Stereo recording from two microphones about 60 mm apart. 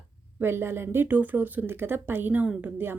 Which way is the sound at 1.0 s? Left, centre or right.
Right.